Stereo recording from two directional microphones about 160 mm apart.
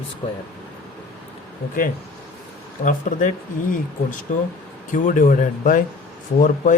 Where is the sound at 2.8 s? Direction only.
55° left (ahead or behind).